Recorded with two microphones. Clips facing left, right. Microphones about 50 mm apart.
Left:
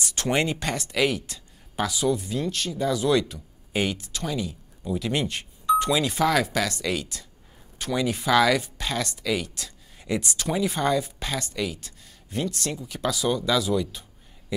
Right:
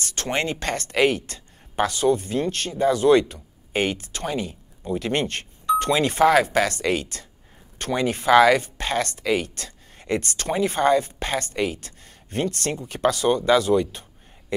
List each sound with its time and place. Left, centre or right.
0.0 s speech: right
1.2 s speech: right